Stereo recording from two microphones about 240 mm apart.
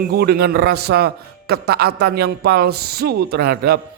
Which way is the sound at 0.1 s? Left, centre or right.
Right.